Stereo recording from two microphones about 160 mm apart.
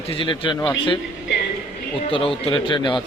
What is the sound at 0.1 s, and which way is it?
Speech, 30° left (ahead or behind).